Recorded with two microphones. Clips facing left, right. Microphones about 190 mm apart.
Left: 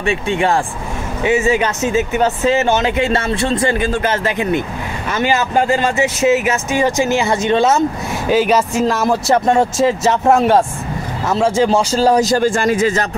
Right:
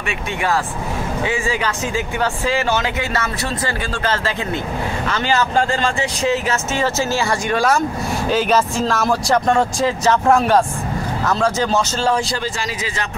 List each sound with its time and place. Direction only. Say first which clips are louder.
0.3 s speech: left 3 dB; 25° left (ahead or behind)
8.3 s a man's voice: left 4 dB; 10° left (ahead or behind); by 13.0 s 50° left (ahead or behind)